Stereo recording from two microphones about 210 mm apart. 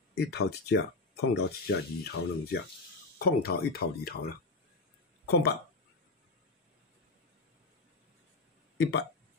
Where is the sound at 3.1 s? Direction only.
45° left (ahead or behind).